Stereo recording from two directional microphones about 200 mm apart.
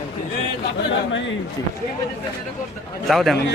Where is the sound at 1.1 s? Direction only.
65° left (ahead or behind).